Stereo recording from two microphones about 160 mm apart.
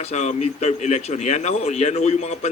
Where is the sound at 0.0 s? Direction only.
45° left (ahead or behind).